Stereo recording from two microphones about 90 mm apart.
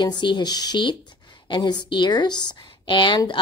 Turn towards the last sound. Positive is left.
turn(degrees=65)  # may be behind; listen again after turning